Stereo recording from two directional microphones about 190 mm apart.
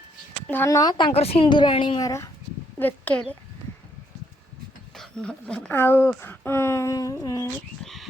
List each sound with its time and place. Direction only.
0.4 s speech: 10° left (ahead or behind)
4.9 s a woman's voice: 5° left (ahead or behind)